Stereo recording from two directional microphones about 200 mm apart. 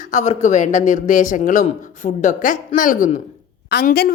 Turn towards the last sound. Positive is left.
turn(degrees=50)  # may be behind; listen again after turning